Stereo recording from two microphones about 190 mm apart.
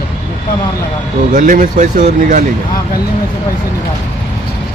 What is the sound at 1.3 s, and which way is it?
Speech, 45° right (ahead or behind).